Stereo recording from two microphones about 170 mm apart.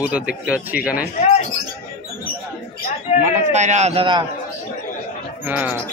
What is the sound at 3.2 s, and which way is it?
A man's voice, 45° right (ahead or behind).